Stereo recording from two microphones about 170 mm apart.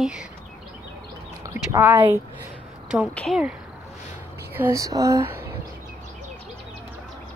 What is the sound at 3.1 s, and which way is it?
Speech, 5° left (ahead or behind).